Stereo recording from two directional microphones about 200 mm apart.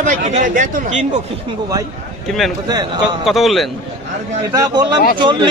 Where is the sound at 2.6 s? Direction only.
20° right (ahead or behind).